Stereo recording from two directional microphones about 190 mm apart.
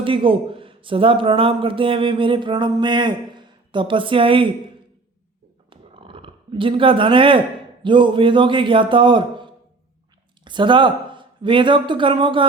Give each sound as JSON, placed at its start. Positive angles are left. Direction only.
{"t": 0.0, "sound": "a man's voice", "side_deg": -25}
{"t": 5.7, "sound": "speech", "side_deg": -30}